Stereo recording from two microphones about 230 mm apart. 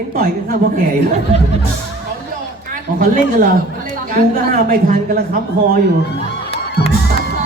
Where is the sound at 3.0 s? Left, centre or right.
Right.